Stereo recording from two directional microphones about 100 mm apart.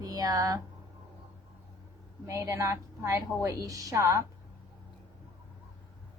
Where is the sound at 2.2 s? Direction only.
30° right (ahead or behind).